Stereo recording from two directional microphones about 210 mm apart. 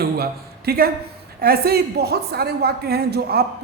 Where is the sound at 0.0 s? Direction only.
45° right (ahead or behind).